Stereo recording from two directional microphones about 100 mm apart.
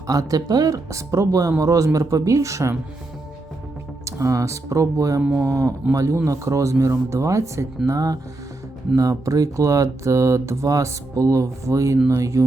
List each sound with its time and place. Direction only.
0.1 s speech: 35° right (ahead or behind)
4.0 s speech: 35° right (ahead or behind)